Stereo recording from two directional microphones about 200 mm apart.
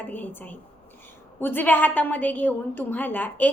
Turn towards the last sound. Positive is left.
turn(degrees=10)  # may be behind; listen again after turning